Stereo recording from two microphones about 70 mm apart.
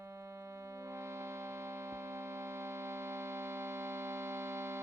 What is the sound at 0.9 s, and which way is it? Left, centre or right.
Music, right.